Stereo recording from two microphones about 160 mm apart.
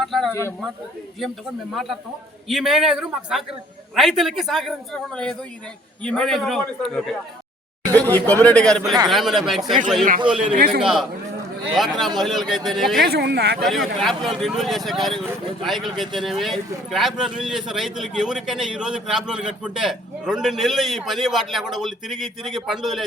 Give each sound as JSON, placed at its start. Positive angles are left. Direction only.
{"t": 0.0, "sound": "a sound", "side_deg": 0}
{"t": 1.7, "sound": "a man's voice", "side_deg": 0}
{"t": 10.5, "sound": "a man's voice", "side_deg": -65}
{"t": 10.8, "sound": "a man's voice", "side_deg": -5}
{"t": 13.0, "sound": "speech", "side_deg": -90}
{"t": 13.6, "sound": "a man's voice", "side_deg": 0}